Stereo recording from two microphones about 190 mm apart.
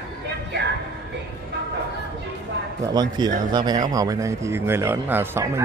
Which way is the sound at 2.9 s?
20° right (ahead or behind).